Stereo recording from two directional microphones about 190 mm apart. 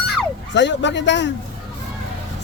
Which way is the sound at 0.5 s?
70° left (ahead or behind).